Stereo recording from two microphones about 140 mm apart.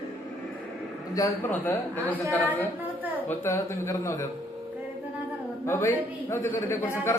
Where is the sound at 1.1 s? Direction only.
25° left (ahead or behind).